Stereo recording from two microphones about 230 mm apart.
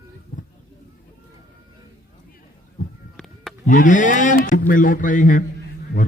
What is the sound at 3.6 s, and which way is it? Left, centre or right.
A man's voice, left.